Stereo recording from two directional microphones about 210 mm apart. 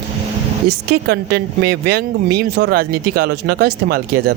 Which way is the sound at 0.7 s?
50° right (ahead or behind).